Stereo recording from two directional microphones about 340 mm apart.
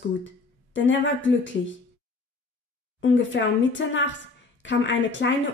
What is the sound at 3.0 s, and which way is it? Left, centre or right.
A woman's voice, left.